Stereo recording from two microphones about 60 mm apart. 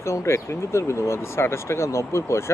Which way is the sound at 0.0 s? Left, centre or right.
Left.